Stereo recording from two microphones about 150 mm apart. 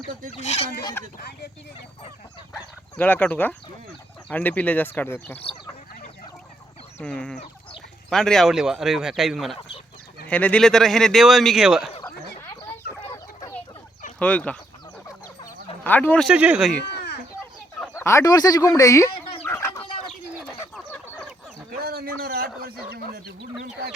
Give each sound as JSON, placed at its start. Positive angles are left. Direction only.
{"t": 0.3, "sound": "speech", "side_deg": 45}
{"t": 3.0, "sound": "speech", "side_deg": 10}
{"t": 7.0, "sound": "speech", "side_deg": 5}
{"t": 9.6, "sound": "speech", "side_deg": 35}
{"t": 10.2, "sound": "speech", "side_deg": 10}
{"t": 14.2, "sound": "speech", "side_deg": 10}
{"t": 15.8, "sound": "speech", "side_deg": 10}
{"t": 16.2, "sound": "speech", "side_deg": -10}
{"t": 16.9, "sound": "a sound", "side_deg": 90}
{"t": 17.9, "sound": "speech", "side_deg": 20}
{"t": 19.4, "sound": "chicken", "side_deg": 15}
{"t": 21.7, "sound": "speech", "side_deg": -90}